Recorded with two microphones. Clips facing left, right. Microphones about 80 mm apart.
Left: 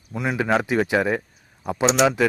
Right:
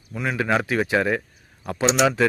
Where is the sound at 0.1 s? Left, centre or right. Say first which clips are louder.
Left 1 dB; left.